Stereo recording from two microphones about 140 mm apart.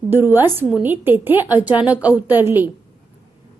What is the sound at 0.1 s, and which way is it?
A woman's voice, 15° right (ahead or behind).